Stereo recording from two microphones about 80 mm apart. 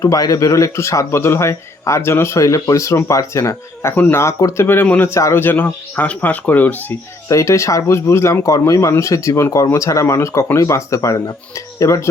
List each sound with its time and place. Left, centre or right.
0.0 s a man's voice: left
3.9 s speech: left
4.2 s a man's voice: left
4.6 s speech: left
5.0 s speech: left
7.3 s a man's voice: left